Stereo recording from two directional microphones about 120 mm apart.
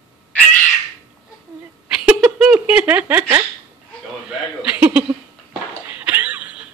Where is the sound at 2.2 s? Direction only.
15° right (ahead or behind).